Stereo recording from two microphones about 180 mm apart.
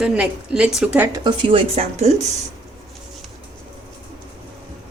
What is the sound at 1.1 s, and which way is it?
A woman's voice, 25° right (ahead or behind).